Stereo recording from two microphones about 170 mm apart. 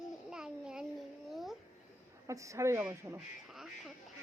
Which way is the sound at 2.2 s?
20° right (ahead or behind).